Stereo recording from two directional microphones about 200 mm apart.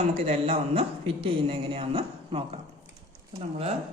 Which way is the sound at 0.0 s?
30° right (ahead or behind).